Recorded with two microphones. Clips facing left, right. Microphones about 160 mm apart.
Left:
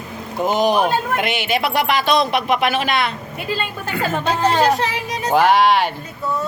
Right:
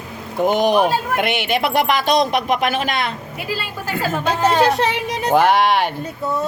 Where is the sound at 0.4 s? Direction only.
50° right (ahead or behind).